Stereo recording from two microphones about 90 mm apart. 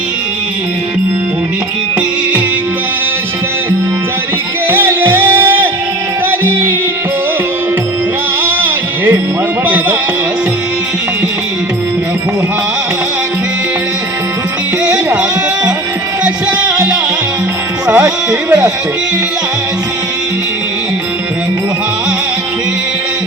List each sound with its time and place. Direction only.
4.7 s music: 25° right (ahead or behind)
8.4 s music: 20° right (ahead or behind)
14.8 s music: 10° right (ahead or behind)
17.8 s speech: 10° right (ahead or behind)